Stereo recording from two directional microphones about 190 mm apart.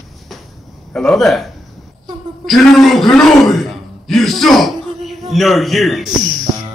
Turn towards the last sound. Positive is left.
turn(degrees=-20)  # may be behind; listen again after turning